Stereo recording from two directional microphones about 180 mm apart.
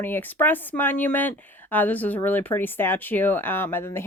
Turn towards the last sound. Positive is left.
turn(degrees=15)  # may be behind; listen again after turning